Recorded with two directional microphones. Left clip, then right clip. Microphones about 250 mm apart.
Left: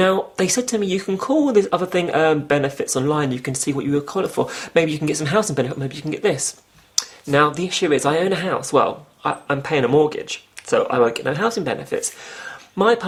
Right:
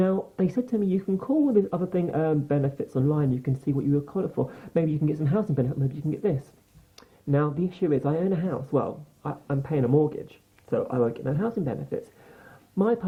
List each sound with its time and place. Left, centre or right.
0.3 s speech: centre
1.2 s speech: left
1.5 s speech: centre